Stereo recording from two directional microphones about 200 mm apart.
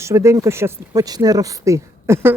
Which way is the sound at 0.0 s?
15° right (ahead or behind).